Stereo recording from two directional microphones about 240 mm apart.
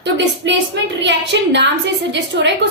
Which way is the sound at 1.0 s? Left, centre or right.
Right.